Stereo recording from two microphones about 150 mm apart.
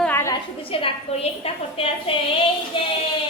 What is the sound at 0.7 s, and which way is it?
A woman's voice, 40° left (ahead or behind).